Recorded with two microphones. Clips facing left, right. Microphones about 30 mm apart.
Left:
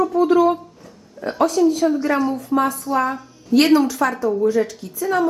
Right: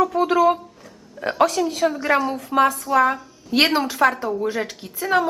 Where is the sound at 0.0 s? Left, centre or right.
Right.